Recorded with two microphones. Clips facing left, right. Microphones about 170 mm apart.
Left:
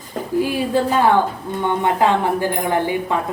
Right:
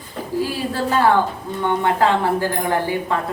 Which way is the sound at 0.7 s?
15° left (ahead or behind).